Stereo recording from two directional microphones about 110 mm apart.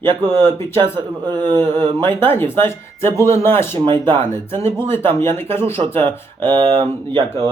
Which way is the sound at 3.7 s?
45° right (ahead or behind).